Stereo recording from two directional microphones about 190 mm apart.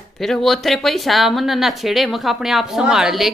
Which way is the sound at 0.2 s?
Centre (ahead or behind).